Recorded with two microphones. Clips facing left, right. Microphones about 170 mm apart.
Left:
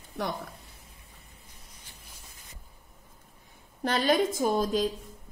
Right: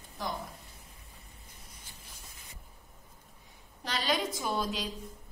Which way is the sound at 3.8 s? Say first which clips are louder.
Left 7 dB; 50° left (ahead or behind).